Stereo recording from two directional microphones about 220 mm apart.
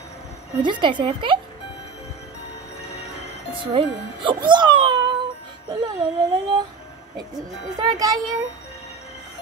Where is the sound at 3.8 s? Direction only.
25° right (ahead or behind).